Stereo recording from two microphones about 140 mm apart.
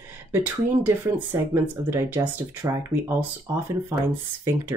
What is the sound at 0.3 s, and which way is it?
Speech, 15° right (ahead or behind).